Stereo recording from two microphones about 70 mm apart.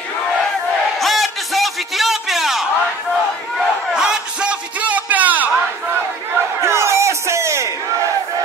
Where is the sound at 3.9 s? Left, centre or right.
Centre.